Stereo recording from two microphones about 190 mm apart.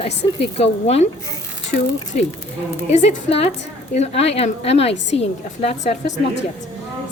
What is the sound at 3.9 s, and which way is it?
A woman's voice, 35° left (ahead or behind).